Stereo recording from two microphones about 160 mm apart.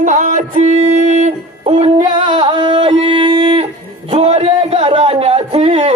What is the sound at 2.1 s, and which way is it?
Singing, 30° right (ahead or behind).